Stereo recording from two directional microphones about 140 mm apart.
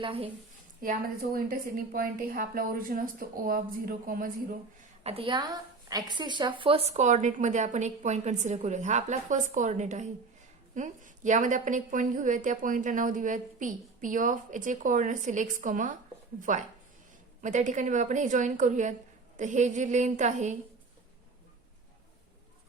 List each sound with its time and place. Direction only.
0.0 s a woman's voice: 40° right (ahead or behind)
0.8 s a woman's voice: 90° right
5.0 s a woman's voice: 40° right (ahead or behind); by 20.6 s 55° right (ahead or behind)